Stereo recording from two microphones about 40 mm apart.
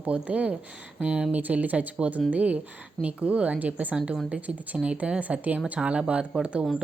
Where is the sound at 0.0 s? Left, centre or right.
Right.